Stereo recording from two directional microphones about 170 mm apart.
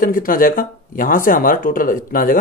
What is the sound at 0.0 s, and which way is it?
Speech, 55° left (ahead or behind).